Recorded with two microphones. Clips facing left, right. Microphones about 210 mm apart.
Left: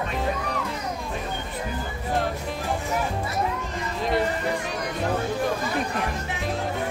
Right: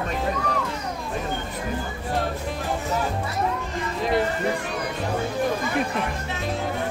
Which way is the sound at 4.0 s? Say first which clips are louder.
Right 1 dB; centre (ahead or behind).